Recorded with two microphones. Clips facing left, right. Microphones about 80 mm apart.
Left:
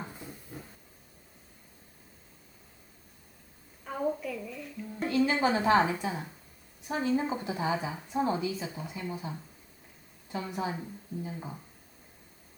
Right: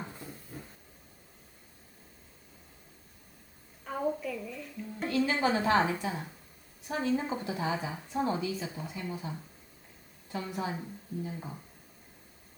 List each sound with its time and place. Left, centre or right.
0.0 s a sound: centre
3.8 s music: centre
5.0 s a woman's voice: centre
10.3 s a woman's voice: centre